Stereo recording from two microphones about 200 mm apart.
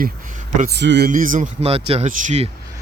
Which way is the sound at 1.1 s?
40° right (ahead or behind).